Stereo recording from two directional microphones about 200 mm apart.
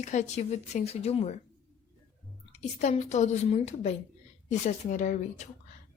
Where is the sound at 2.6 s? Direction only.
35° left (ahead or behind).